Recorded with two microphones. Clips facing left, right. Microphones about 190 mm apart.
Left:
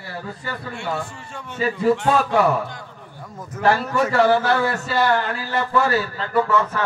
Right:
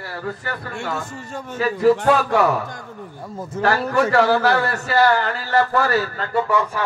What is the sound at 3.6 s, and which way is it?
A man's voice, 65° right (ahead or behind).